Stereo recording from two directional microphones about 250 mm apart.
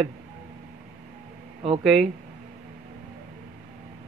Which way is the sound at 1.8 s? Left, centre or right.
Centre.